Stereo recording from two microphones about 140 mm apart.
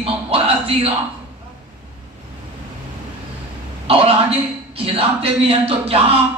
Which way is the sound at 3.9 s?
40° right (ahead or behind).